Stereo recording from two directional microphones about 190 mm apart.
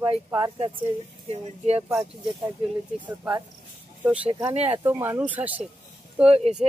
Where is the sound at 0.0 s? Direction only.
20° right (ahead or behind).